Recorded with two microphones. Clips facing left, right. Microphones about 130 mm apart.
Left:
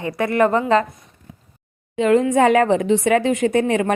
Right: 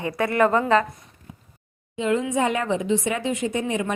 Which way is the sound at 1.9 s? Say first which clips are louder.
Left 7 dB; 65° left (ahead or behind).